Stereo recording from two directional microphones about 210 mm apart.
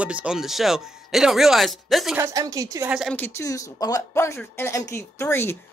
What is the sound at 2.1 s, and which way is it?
Speech, 15° right (ahead or behind).